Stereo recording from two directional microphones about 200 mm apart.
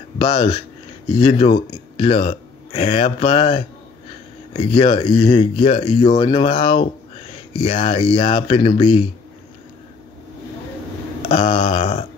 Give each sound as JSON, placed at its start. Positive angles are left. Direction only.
{"t": 0.2, "sound": "speech", "side_deg": 25}
{"t": 11.2, "sound": "speech", "side_deg": 30}